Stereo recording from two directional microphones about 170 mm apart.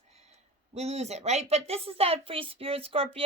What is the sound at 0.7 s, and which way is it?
Speech, 40° right (ahead or behind).